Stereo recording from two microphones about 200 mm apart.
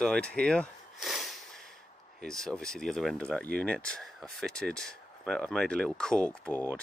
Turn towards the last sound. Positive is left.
turn(degrees=10)  # may be behind; listen again after turning